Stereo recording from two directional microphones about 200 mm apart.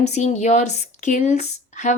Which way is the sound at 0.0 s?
35° left (ahead or behind).